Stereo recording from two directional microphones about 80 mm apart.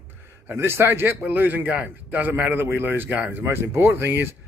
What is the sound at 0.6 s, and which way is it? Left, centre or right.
Speech, right.